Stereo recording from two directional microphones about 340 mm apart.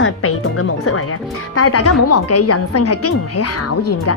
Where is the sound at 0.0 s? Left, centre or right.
Left.